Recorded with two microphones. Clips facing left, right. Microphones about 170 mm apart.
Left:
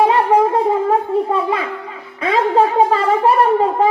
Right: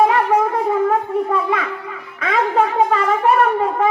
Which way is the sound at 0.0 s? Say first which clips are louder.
Left 2 dB; 30° left (ahead or behind).